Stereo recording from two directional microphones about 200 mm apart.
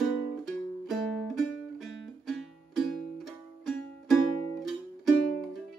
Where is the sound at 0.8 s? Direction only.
Centre (ahead or behind).